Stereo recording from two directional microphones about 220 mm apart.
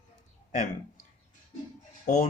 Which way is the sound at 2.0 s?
35° left (ahead or behind).